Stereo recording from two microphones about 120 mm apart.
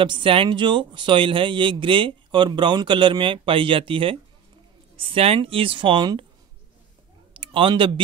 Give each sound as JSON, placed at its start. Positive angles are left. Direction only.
{"t": 0.0, "sound": "speech", "side_deg": -45}
{"t": 7.3, "sound": "speech", "side_deg": -45}